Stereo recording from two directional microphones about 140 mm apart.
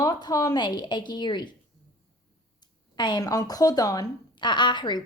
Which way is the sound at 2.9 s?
30° left (ahead or behind).